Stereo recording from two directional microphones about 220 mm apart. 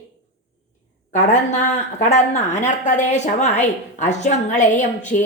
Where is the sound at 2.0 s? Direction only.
30° left (ahead or behind).